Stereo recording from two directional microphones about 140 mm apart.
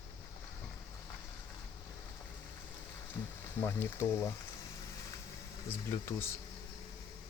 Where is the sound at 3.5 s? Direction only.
15° left (ahead or behind).